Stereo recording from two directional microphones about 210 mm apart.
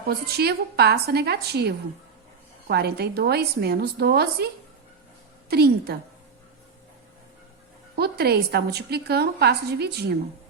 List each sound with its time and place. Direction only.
0.3 s a woman's voice: 50° right (ahead or behind)
7.9 s a woman's voice: 50° right (ahead or behind)